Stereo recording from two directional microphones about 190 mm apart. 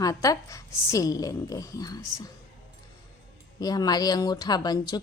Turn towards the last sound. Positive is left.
turn(degrees=20)  # may be behind; listen again after turning